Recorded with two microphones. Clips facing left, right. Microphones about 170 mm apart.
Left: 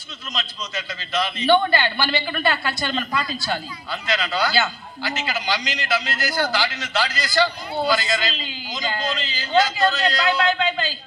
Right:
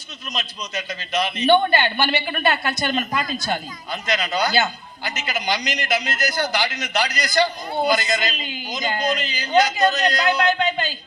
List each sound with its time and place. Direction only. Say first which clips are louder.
0.3 s a man's voice: right 1 dB; 20° right (ahead or behind)
3.1 s speech: right 1 dB; 45° right (ahead or behind)
3.3 s a man's voice: right 1 dB; 20° right (ahead or behind)